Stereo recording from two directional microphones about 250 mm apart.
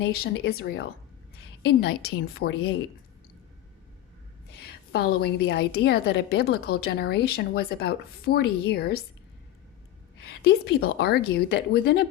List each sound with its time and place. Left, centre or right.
0.0 s a woman's voice: left
4.6 s a woman's voice: left
10.2 s a woman's voice: left